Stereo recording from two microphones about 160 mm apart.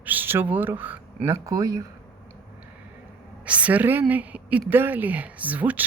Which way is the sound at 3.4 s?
10° right (ahead or behind).